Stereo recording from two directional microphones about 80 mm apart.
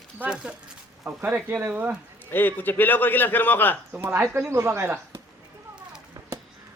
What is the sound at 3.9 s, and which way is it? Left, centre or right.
Speech, right.